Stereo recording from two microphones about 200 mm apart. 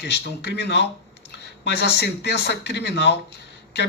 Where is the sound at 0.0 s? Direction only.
60° left (ahead or behind).